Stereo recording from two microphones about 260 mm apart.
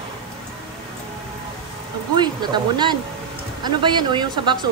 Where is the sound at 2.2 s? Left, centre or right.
Centre.